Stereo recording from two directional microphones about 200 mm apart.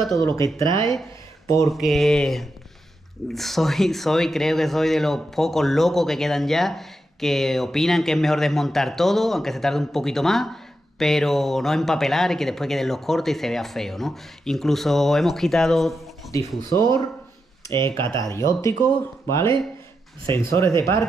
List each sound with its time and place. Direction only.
0.6 s speech: 15° left (ahead or behind)
1.7 s speech: centre (ahead or behind)
16.3 s speech: 15° left (ahead or behind)